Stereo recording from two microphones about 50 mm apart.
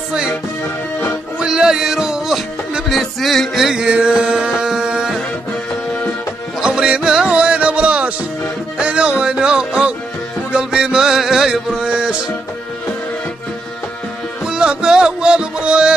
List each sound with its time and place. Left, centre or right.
1.4 s music: centre
2.9 s music: centre
3.8 s music: right
5.7 s music: left
6.6 s music: centre
14.4 s music: centre